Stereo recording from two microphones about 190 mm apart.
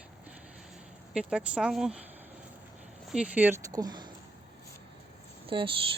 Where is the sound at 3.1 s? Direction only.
5° right (ahead or behind); by 4.1 s 20° right (ahead or behind).